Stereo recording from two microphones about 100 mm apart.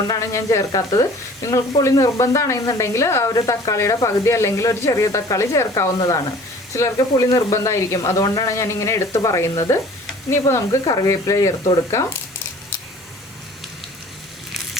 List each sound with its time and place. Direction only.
0.1 s speech: 30° left (ahead or behind)